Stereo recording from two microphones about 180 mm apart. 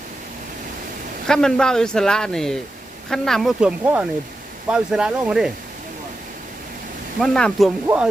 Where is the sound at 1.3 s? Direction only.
5° left (ahead or behind).